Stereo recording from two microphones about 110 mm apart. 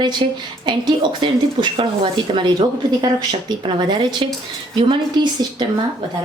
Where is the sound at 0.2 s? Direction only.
45° right (ahead or behind).